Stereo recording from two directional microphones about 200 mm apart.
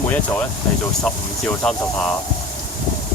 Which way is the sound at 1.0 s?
5° left (ahead or behind).